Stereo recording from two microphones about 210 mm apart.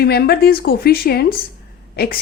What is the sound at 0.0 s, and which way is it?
A woman's voice, 50° left (ahead or behind).